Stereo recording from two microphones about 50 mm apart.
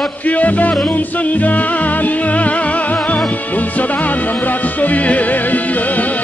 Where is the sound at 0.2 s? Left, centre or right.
Left.